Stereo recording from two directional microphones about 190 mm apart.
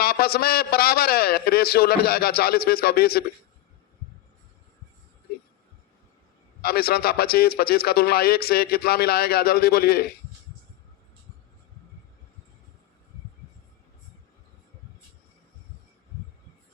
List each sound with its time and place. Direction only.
0.0 s a man's voice: 55° left (ahead or behind)
6.6 s a man's voice: 55° left (ahead or behind)